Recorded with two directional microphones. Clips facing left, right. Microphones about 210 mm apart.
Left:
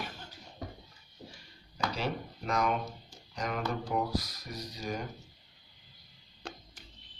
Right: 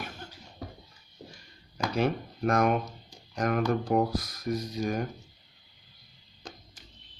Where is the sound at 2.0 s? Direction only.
55° right (ahead or behind).